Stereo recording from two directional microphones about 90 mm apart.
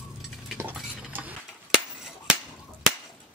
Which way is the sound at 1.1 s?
20° right (ahead or behind).